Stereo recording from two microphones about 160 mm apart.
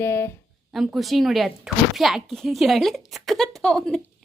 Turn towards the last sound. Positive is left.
turn(degrees=5)  # may be behind; listen again after turning